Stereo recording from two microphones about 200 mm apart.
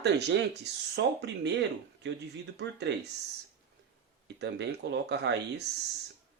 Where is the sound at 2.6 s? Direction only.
60° right (ahead or behind).